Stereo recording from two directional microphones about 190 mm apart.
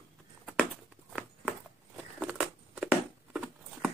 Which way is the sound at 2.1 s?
5° right (ahead or behind).